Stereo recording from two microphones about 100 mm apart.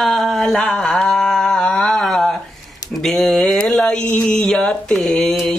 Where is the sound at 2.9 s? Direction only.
Centre (ahead or behind).